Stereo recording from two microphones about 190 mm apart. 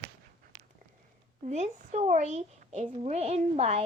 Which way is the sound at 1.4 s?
35° right (ahead or behind).